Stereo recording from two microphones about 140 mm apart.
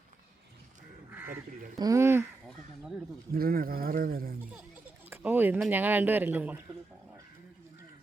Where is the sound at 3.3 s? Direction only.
90° right.